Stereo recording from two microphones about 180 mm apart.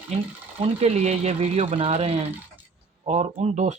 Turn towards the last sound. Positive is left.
turn(degrees=-40)  # may be behind; listen again after turning